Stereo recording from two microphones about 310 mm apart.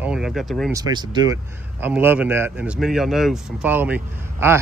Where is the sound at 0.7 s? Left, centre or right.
Centre.